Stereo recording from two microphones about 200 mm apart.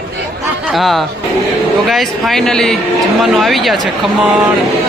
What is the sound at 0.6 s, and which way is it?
Speech, centre (ahead or behind).